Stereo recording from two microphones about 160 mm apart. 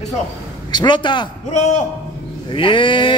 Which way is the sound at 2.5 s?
30° left (ahead or behind).